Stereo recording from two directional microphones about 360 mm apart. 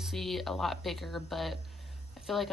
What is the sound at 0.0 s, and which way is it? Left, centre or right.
Speech, centre.